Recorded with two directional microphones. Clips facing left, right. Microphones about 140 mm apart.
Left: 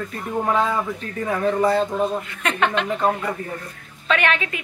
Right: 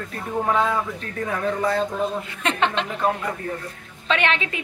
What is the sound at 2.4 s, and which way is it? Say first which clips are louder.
Speech: left 1 dB; 25° right (ahead or behind).